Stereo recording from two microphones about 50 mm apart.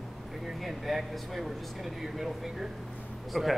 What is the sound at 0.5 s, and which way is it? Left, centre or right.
A man's voice, centre.